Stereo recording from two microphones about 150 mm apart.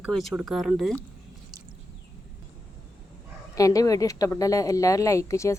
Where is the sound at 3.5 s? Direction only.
20° left (ahead or behind).